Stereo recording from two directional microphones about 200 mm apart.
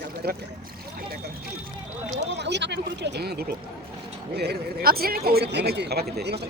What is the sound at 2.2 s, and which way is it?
Speech, 60° right (ahead or behind).